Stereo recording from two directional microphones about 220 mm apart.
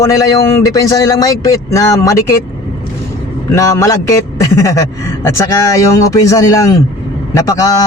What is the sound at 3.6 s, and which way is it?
Speech, 15° left (ahead or behind).